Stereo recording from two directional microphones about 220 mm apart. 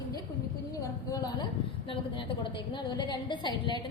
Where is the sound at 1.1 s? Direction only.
15° left (ahead or behind).